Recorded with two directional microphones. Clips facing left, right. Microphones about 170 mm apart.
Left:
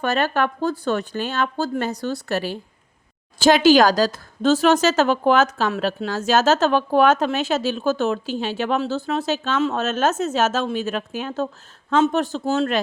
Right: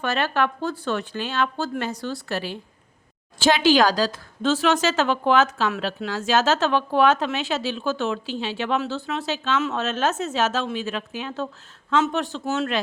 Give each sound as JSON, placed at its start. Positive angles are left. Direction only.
{"t": 0.0, "sound": "speech", "side_deg": 40}